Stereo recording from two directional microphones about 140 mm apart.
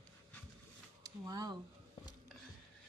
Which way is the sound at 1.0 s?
25° right (ahead or behind).